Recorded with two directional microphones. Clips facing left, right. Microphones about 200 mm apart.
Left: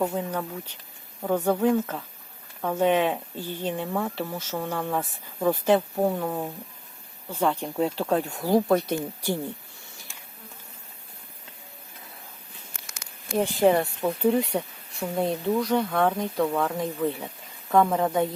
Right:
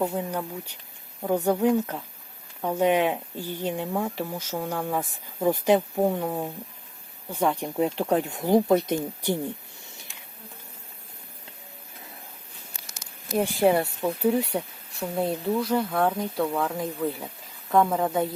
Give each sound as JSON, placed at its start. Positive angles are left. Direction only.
{"t": 0.2, "sound": "speech", "side_deg": -10}
{"t": 13.3, "sound": "speech", "side_deg": -10}